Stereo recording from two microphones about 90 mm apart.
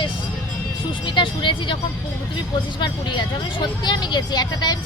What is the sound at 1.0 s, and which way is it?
Speech, 65° left (ahead or behind).